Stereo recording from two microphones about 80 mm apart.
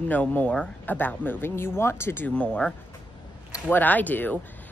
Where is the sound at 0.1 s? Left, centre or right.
Left.